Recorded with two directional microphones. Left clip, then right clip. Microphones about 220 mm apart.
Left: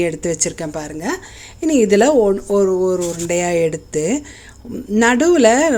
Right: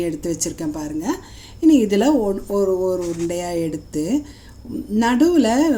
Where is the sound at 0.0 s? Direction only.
30° left (ahead or behind).